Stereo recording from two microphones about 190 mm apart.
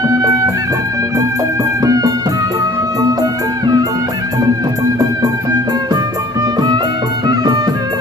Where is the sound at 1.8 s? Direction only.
20° right (ahead or behind).